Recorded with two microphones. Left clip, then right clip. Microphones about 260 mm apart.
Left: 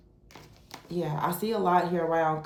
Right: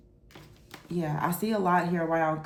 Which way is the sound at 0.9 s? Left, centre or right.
Right.